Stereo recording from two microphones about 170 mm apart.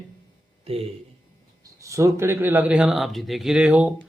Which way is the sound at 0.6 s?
35° right (ahead or behind).